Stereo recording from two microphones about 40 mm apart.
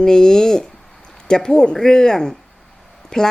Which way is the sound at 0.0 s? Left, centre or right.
Centre.